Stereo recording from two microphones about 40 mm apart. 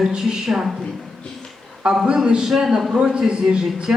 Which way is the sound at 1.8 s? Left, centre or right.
Centre.